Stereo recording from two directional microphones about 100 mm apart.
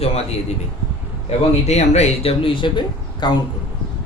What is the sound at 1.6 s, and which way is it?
Speech, 90° left.